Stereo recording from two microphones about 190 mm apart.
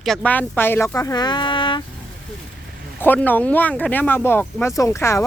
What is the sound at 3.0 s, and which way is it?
Speech, 10° left (ahead or behind).